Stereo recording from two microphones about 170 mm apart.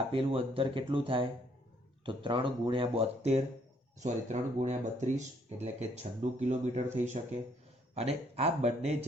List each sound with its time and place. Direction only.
0.1 s speech: 30° right (ahead or behind)